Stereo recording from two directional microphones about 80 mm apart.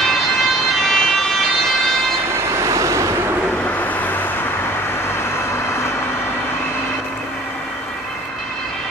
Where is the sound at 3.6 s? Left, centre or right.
Left.